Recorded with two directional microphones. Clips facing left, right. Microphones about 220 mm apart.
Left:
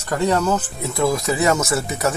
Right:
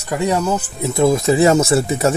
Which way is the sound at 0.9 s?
25° right (ahead or behind).